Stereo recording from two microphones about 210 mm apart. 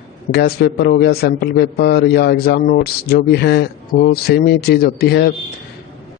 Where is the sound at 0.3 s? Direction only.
50° left (ahead or behind).